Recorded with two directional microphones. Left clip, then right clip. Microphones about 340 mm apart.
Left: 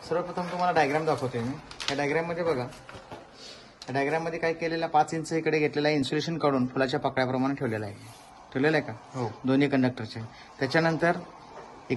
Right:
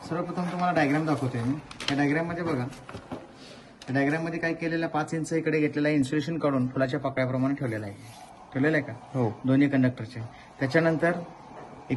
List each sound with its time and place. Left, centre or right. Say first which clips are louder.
0.0 s speech: left 2 dB; centre
3.9 s speech: even; centre